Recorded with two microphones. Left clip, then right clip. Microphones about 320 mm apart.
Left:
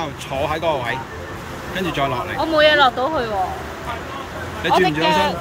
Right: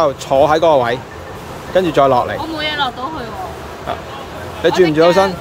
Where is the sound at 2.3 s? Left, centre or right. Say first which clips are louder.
Left 5 dB; centre.